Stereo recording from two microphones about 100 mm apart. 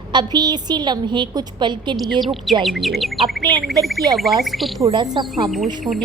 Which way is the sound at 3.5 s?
50° right (ahead or behind).